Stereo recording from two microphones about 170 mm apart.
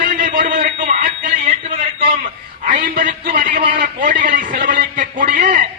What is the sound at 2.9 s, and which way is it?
A man's voice, 55° right (ahead or behind).